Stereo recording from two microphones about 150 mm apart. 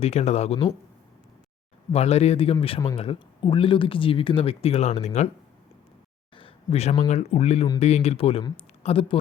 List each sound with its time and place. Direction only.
0.0 s speech: 45° left (ahead or behind)
1.9 s speech: 45° left (ahead or behind)
6.3 s a sound: 40° left (ahead or behind)
7.1 s speech: 45° left (ahead or behind)